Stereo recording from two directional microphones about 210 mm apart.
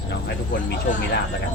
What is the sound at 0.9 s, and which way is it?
Speech, 35° left (ahead or behind).